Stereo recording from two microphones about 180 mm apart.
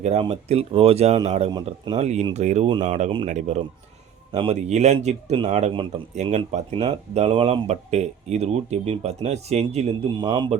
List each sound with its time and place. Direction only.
0.0 s speech: 35° right (ahead or behind)
1.5 s speech: 25° right (ahead or behind)